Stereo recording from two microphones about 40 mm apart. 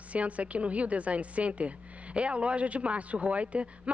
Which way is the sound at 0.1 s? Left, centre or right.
Right.